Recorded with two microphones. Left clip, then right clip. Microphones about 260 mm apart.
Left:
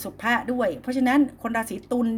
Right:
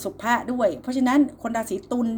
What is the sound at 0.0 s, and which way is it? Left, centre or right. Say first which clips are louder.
Speech: right 1 dB; left.